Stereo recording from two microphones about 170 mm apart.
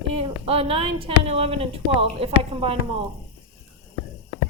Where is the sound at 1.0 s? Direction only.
35° right (ahead or behind).